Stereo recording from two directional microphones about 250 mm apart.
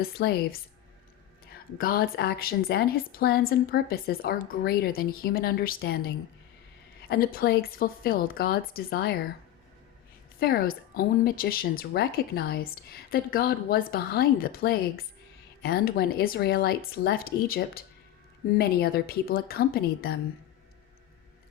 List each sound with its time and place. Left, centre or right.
0.0 s speech: left
1.8 s speech: left
10.4 s speech: left